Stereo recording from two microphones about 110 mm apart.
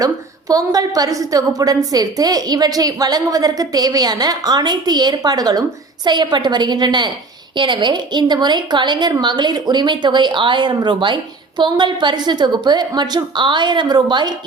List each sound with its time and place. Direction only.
0.0 s a woman's voice: 35° right (ahead or behind)